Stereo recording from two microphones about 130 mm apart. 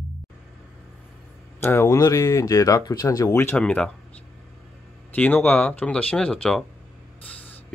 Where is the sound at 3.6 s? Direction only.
10° left (ahead or behind).